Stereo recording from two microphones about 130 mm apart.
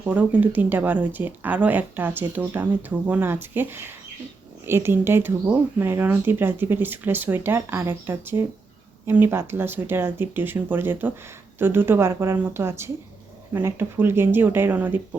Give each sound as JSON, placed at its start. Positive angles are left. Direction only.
{"t": 0.0, "sound": "speech", "side_deg": -10}